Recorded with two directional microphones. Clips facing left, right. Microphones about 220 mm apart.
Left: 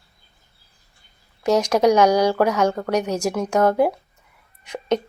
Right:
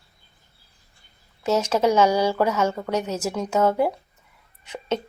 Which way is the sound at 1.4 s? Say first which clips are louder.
Left 4 dB; 15° left (ahead or behind).